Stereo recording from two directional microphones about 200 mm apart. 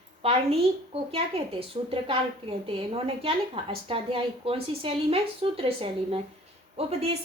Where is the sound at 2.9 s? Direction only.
30° right (ahead or behind).